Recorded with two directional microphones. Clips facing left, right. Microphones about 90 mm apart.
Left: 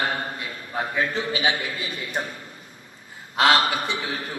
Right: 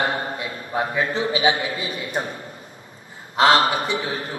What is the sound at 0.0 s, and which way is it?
A man's voice, 30° right (ahead or behind).